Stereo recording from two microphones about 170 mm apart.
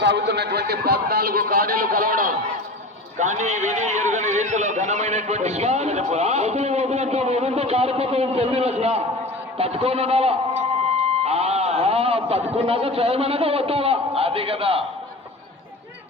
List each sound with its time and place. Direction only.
0.0 s a man's voice: 85° right; by 14.8 s 35° right (ahead or behind)